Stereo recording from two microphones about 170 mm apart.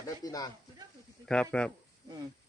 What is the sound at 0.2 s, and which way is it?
Speech, 20° left (ahead or behind).